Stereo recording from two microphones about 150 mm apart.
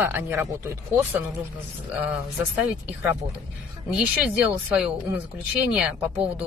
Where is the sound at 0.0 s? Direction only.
15° right (ahead or behind).